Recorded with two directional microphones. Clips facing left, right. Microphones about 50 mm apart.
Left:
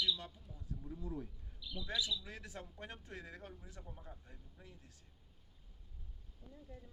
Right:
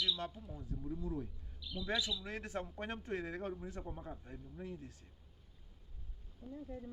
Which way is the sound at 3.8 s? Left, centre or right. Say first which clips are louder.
Right 8 dB; right.